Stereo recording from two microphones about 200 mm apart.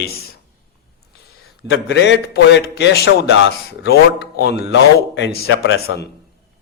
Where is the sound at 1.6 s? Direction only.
60° left (ahead or behind).